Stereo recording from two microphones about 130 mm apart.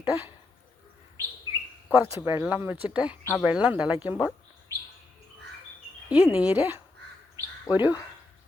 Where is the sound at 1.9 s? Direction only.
15° right (ahead or behind).